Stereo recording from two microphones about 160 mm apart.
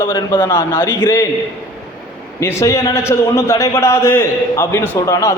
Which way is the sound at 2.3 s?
20° left (ahead or behind).